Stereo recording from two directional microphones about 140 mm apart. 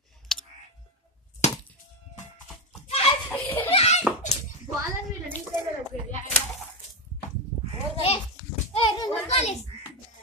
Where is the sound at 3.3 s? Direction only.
15° left (ahead or behind).